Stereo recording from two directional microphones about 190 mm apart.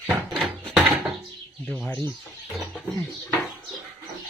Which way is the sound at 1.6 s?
5° left (ahead or behind).